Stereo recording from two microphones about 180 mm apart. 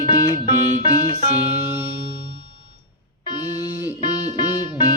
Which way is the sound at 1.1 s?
35° right (ahead or behind).